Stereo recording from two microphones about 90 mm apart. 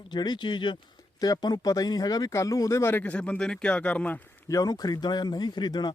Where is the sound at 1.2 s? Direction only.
45° left (ahead or behind); by 4.2 s 15° left (ahead or behind).